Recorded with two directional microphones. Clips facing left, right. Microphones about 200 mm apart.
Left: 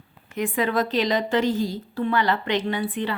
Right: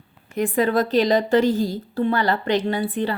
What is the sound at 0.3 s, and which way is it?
A woman's voice, 35° right (ahead or behind).